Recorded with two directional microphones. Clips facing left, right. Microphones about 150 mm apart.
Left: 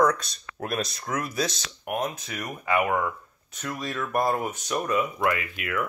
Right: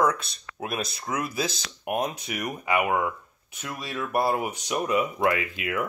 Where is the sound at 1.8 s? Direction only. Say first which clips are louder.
Right 1 dB; 20° right (ahead or behind).